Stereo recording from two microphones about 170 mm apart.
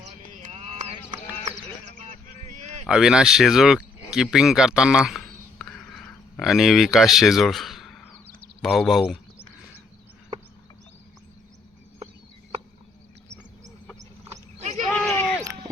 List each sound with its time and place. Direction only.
0.4 s clip-clop: 40° right (ahead or behind)
2.8 s speech: 5° right (ahead or behind)
4.1 s a sound: 5° right (ahead or behind)
8.6 s speech: centre (ahead or behind)
14.6 s goat: 40° right (ahead or behind)
14.8 s a sound: 10° left (ahead or behind)